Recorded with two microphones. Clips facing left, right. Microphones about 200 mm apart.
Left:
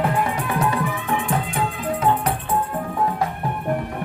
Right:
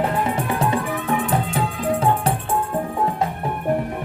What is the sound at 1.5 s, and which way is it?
Music, 30° right (ahead or behind).